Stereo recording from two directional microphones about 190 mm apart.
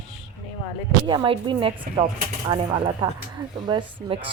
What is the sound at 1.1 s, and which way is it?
Speech, 25° right (ahead or behind).